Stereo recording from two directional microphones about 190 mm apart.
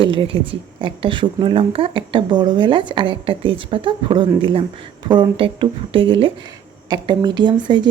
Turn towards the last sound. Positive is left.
turn(degrees=-25)  # may be behind; listen again after turning